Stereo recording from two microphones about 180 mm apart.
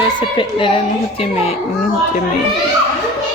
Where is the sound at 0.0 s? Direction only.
25° left (ahead or behind).